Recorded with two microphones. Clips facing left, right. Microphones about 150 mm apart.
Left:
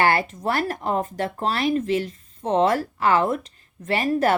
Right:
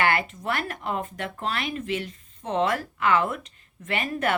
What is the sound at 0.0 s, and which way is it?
Speech, 35° left (ahead or behind).